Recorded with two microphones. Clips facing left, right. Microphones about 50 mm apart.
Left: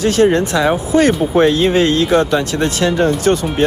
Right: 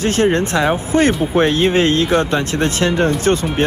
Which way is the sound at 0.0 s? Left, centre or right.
Right.